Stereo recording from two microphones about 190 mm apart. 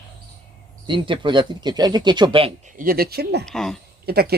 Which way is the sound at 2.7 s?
50° right (ahead or behind).